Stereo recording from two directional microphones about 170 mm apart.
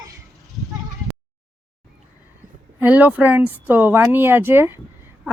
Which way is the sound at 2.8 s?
10° right (ahead or behind).